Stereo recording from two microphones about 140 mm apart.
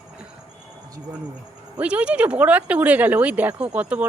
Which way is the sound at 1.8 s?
10° right (ahead or behind).